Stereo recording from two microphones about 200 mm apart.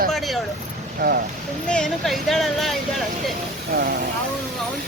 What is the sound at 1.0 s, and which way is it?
Speech, 50° right (ahead or behind).